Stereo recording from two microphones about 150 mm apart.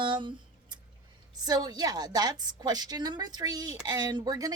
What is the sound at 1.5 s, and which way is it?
A woman's voice, 25° right (ahead or behind).